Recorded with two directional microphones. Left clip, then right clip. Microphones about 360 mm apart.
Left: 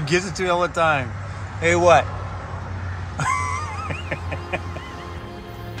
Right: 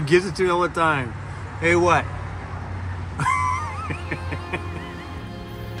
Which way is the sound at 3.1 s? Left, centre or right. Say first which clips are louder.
Right 2 dB; centre.